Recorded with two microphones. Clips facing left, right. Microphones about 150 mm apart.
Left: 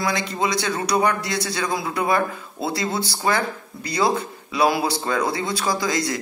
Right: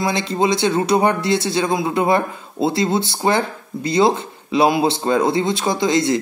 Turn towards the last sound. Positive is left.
turn(degrees=-25)  # may be behind; listen again after turning